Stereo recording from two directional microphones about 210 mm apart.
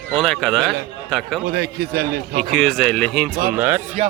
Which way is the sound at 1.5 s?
50° right (ahead or behind).